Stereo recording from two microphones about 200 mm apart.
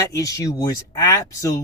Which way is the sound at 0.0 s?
15° left (ahead or behind).